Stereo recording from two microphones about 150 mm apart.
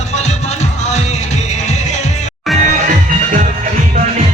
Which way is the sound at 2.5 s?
Centre (ahead or behind).